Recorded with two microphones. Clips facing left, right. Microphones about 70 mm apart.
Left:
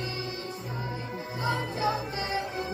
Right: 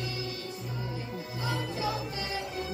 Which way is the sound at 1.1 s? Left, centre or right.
Left.